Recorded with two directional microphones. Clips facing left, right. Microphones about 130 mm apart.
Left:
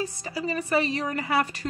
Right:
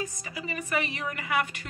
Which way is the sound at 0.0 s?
35° left (ahead or behind).